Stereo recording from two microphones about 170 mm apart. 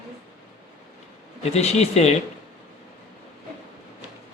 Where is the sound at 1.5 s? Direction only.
40° left (ahead or behind).